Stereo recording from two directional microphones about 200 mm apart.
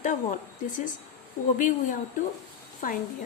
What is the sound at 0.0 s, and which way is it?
A woman's voice, 40° left (ahead or behind).